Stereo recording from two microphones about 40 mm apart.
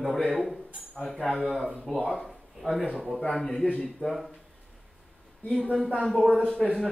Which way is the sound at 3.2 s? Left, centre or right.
Centre.